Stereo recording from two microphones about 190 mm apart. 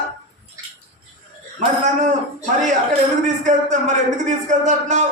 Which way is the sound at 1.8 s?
40° right (ahead or behind).